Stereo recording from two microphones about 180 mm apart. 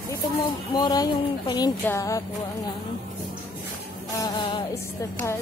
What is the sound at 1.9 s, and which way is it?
Music, 20° left (ahead or behind).